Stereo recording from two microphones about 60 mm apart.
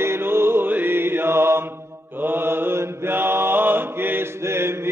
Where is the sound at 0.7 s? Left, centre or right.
Right.